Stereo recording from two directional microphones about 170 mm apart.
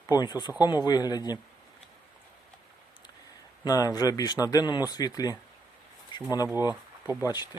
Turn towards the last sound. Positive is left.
turn(degrees=-15)  # may be behind; listen again after turning